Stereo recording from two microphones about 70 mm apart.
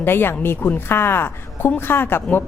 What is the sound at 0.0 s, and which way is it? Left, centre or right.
Speech, left.